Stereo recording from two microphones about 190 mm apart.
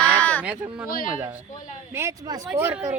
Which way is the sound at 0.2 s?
5° left (ahead or behind).